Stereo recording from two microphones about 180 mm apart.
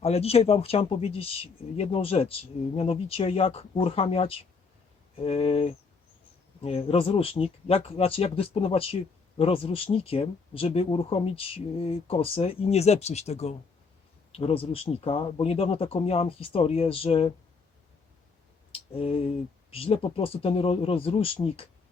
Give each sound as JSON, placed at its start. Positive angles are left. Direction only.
{"t": 0.0, "sound": "speech", "side_deg": 35}
{"t": 18.7, "sound": "a sound", "side_deg": 30}
{"t": 19.7, "sound": "speech", "side_deg": 30}